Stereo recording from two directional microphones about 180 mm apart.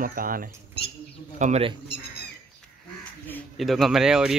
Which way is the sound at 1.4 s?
35° right (ahead or behind).